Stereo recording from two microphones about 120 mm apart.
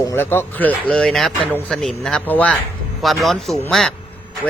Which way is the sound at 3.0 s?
Centre (ahead or behind).